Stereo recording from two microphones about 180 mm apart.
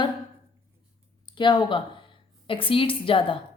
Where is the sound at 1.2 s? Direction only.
25° left (ahead or behind).